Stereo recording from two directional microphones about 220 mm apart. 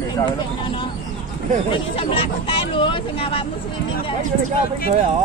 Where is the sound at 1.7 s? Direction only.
25° left (ahead or behind).